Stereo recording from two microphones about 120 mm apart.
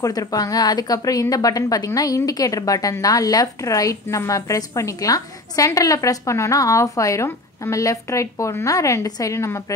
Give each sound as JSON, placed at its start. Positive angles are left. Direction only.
{"t": 0.0, "sound": "a woman's voice", "side_deg": 30}